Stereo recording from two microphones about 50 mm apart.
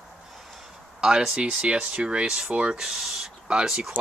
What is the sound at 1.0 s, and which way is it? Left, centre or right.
Speech, centre.